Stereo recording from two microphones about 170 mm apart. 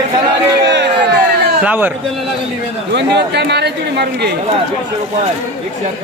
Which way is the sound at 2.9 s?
80° right.